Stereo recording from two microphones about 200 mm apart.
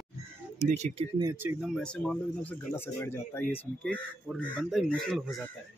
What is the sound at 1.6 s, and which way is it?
Speech, 5° left (ahead or behind).